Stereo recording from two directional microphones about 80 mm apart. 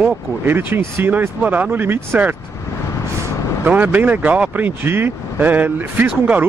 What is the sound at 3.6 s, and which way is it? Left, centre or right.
Speech, right.